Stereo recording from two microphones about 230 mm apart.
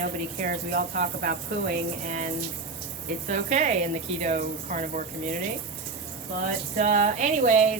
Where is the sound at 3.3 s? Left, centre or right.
Right.